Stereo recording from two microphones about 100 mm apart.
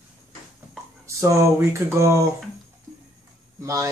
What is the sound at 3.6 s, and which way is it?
Speech, 30° right (ahead or behind).